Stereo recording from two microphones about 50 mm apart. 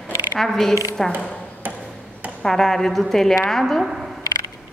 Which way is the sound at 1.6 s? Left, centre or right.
Right.